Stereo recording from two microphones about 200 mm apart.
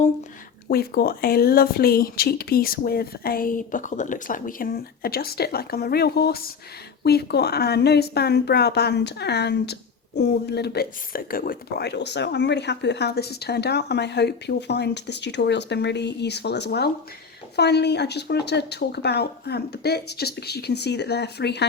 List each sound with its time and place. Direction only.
0.7 s speech: 50° left (ahead or behind)